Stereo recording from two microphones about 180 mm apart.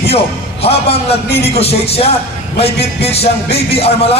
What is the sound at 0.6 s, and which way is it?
A man's voice, 35° left (ahead or behind).